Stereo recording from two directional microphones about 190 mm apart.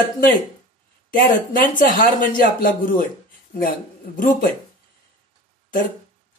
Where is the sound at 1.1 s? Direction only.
45° left (ahead or behind).